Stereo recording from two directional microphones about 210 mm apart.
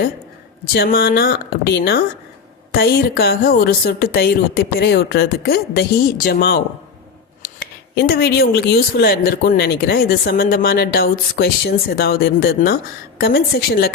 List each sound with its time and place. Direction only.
0.7 s speech: 50° left (ahead or behind)